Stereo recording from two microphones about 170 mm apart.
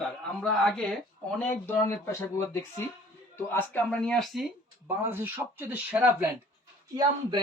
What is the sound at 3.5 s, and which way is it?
Speech, 10° left (ahead or behind).